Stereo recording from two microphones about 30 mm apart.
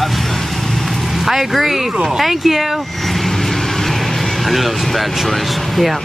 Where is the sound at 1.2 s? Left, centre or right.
Centre.